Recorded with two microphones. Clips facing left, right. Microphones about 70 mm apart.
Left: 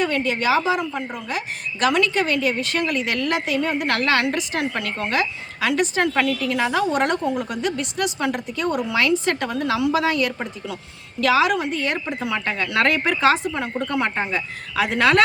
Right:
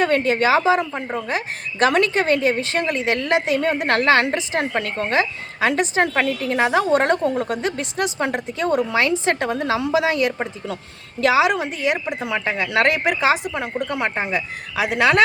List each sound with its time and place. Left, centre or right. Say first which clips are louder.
0.0 s a woman's voice: right 4 dB; right; by 15.2 s centre